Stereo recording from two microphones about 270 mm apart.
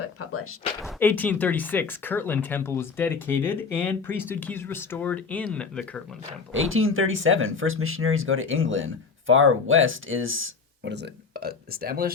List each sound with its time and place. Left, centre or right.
0.0 s speech: left
0.8 s speech: centre
6.5 s speech: right